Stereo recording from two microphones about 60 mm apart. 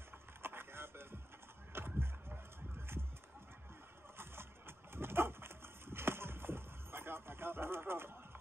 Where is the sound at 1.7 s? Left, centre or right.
Right.